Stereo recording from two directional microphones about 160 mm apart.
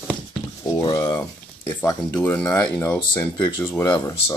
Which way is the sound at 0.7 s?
20° left (ahead or behind).